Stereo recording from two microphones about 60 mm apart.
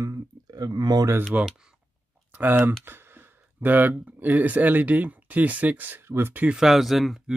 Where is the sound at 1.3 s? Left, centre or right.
Right.